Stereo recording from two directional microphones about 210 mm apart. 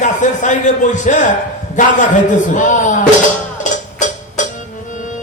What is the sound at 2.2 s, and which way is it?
Speech, 35° left (ahead or behind).